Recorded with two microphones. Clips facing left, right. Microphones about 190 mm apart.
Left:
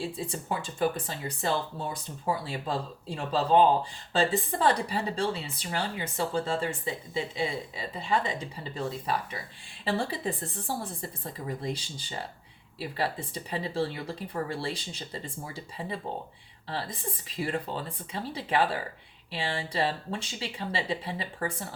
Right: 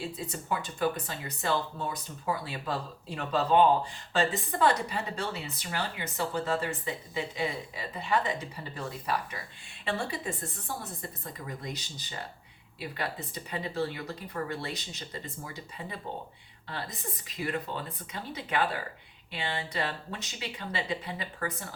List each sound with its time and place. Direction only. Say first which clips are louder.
0.0 s a woman's voice: left 3 dB; 30° left (ahead or behind)